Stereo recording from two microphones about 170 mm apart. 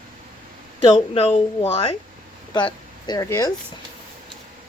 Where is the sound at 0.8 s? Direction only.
30° left (ahead or behind).